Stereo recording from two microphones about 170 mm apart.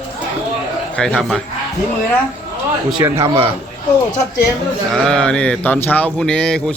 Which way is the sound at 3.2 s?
35° right (ahead or behind).